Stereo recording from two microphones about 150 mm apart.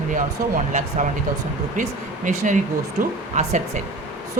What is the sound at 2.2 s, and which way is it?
Speech, 60° right (ahead or behind).